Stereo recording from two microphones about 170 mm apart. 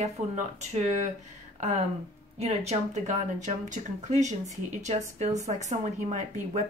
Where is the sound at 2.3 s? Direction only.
40° right (ahead or behind).